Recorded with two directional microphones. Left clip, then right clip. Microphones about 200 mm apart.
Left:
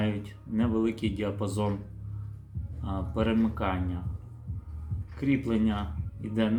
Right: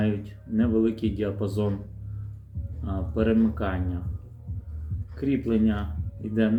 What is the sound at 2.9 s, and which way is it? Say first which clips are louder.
Speech: right 4 dB; 15° left (ahead or behind).